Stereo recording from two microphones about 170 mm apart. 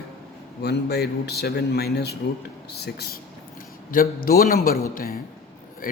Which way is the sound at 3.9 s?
55° left (ahead or behind).